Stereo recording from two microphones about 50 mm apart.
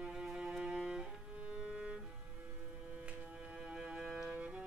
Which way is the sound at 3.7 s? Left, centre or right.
Centre.